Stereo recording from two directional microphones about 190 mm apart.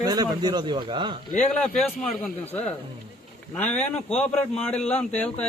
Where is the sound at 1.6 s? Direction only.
5° left (ahead or behind).